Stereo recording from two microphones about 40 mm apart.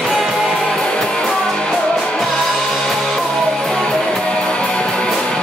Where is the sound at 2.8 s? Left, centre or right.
Centre.